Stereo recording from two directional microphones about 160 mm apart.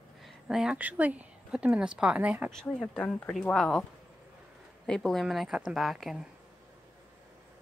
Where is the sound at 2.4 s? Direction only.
5° left (ahead or behind).